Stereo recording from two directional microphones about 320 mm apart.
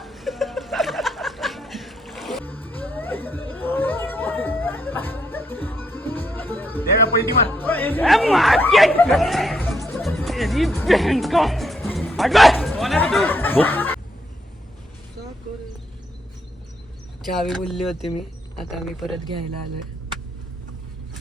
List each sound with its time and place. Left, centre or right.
0.0 s chuckle: centre
6.8 s music: left
7.5 s speech: centre
9.0 s music: centre
17.3 s speech: centre